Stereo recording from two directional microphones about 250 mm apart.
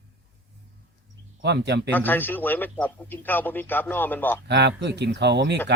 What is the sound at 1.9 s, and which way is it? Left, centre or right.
A man's voice, centre.